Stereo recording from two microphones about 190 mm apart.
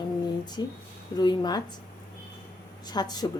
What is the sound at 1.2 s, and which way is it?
Speech, 20° left (ahead or behind).